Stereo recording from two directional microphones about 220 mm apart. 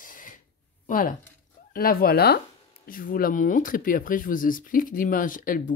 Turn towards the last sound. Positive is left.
turn(degrees=40)  # may be behind; listen again after turning